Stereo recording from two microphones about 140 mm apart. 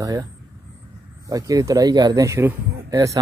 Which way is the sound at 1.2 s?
25° right (ahead or behind).